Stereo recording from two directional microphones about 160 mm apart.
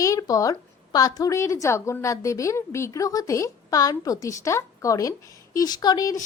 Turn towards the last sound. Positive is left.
turn(degrees=25)  # may be behind; listen again after turning